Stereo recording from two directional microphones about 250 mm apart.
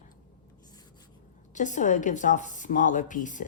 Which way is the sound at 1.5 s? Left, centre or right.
Left.